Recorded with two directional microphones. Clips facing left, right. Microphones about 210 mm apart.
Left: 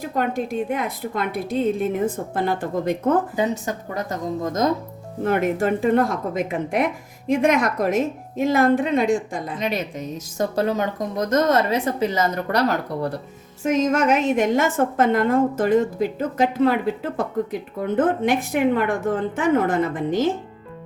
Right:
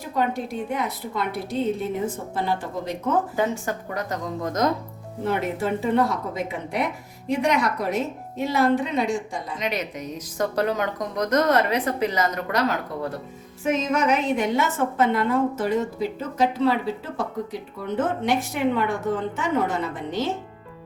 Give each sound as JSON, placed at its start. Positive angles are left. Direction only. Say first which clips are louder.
{"t": 0.1, "sound": "a woman's voice", "louder": "left 1 dB", "side_deg": 50}
{"t": 3.3, "sound": "speech", "louder": "left 2 dB", "side_deg": 20}
{"t": 5.2, "sound": "a woman's voice", "louder": "left 5 dB", "side_deg": 50}
{"t": 7.3, "sound": "a woman's voice", "louder": "left 4 dB", "side_deg": 50}
{"t": 9.6, "sound": "a woman's voice", "louder": "left 2 dB", "side_deg": 30}